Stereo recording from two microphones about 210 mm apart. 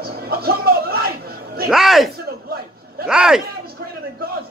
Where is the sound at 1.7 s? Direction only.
Centre (ahead or behind).